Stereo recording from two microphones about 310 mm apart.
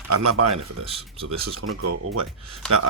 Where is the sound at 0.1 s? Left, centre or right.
Right.